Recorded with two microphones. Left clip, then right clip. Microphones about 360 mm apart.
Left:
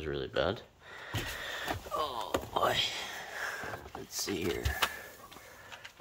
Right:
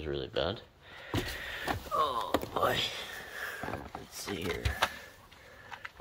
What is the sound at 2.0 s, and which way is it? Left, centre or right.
Whispering, centre.